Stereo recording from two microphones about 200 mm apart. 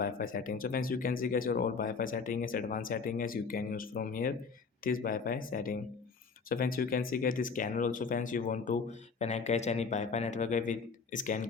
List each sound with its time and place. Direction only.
0.0 s speech: 45° left (ahead or behind)